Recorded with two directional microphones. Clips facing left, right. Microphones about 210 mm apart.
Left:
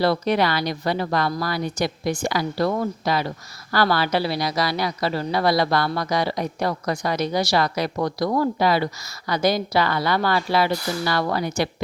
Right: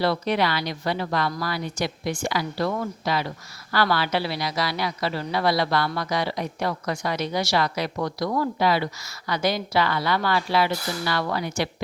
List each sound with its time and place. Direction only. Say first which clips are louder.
0.0 s speech: left 3 dB; 40° left (ahead or behind)